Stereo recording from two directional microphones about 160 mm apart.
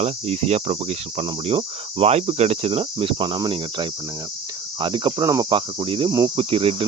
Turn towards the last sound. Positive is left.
turn(degrees=-35)  # may be behind; listen again after turning